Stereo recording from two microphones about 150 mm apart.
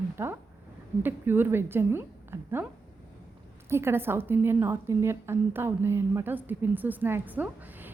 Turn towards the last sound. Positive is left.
turn(degrees=-10)  # may be behind; listen again after turning